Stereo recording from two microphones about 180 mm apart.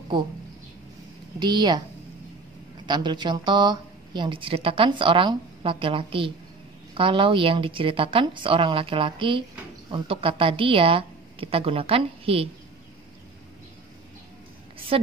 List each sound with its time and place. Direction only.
1.4 s a woman's voice: 25° right (ahead or behind)
2.9 s a woman's voice: 25° right (ahead or behind)
14.9 s a woman's voice: 30° right (ahead or behind)